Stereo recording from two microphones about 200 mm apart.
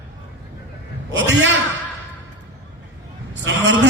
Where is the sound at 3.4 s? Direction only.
60° right (ahead or behind).